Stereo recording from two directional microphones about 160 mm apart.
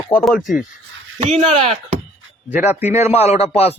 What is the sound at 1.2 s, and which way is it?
Speech, 40° right (ahead or behind).